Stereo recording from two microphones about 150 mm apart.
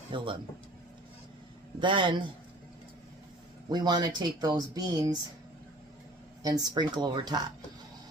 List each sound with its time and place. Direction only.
0.1 s a man's voice: 35° right (ahead or behind)
1.8 s a man's voice: 30° right (ahead or behind)
3.7 s speech: 30° right (ahead or behind)
6.4 s speech: 25° right (ahead or behind)